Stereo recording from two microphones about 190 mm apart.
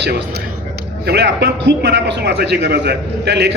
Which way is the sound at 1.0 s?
65° right (ahead or behind).